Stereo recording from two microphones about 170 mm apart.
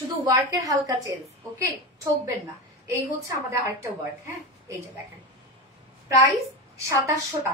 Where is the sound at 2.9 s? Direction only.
15° right (ahead or behind).